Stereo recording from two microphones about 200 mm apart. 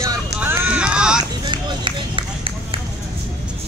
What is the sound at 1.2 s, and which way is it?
Run, 25° right (ahead or behind).